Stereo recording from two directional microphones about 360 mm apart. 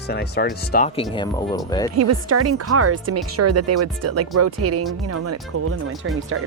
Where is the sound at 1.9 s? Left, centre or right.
Right.